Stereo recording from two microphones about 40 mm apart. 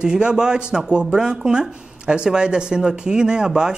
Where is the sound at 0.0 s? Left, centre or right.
Right.